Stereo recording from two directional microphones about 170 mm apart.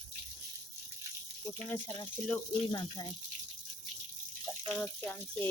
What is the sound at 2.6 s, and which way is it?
Speech, 25° left (ahead or behind).